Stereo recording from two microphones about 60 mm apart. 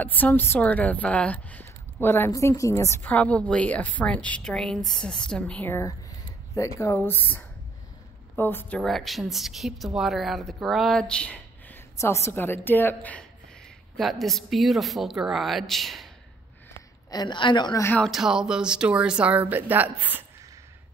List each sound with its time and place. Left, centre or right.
0.0 s a woman's voice: left
2.0 s a woman's voice: left
2.3 s a woman's voice: left
3.0 s a woman's voice: left
4.4 s a woman's voice: centre
5.9 s a sound: left
7.1 s a woman's voice: left
8.8 s a woman's voice: centre
11.0 s speech: centre
12.0 s a woman's voice: left
13.9 s a woman's voice: centre
17.1 s a woman's voice: left
18.1 s speech: centre
19.3 s a woman's voice: right